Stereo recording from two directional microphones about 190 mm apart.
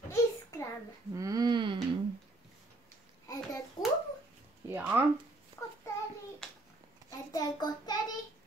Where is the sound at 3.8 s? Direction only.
25° left (ahead or behind).